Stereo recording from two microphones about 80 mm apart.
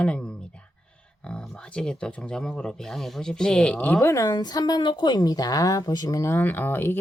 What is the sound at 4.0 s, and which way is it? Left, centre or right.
Speech, left.